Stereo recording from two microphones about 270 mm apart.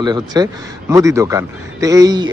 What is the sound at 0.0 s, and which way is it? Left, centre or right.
A man's voice, centre.